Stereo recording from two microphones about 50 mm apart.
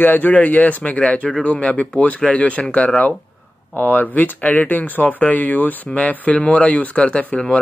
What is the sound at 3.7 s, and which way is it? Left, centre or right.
Speech, left.